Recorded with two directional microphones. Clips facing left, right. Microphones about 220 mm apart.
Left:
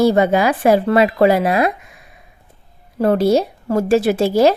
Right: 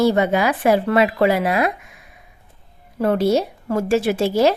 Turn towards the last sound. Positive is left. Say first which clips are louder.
# left 3 dB
turn(degrees=40)  # may be behind; listen again after turning